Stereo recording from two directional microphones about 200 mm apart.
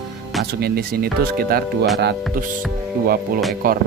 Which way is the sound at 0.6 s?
50° right (ahead or behind).